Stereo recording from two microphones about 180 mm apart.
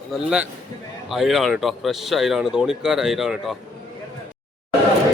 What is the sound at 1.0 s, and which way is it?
Speech, centre (ahead or behind).